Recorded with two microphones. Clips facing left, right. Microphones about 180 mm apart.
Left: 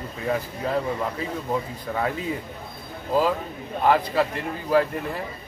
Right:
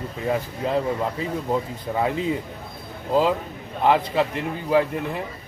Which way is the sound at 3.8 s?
20° right (ahead or behind).